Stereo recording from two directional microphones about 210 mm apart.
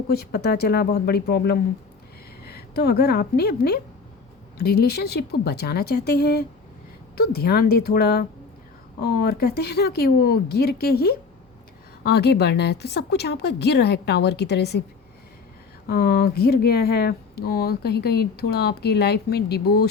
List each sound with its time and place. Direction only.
0.1 s a woman's voice: 50° left (ahead or behind)
15.9 s speech: 50° left (ahead or behind)